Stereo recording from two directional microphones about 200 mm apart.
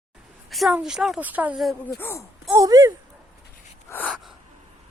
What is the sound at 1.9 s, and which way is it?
Speech, 15° left (ahead or behind).